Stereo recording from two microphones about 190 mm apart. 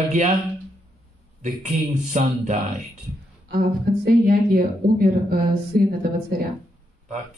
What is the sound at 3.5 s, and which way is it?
Speech, 55° right (ahead or behind).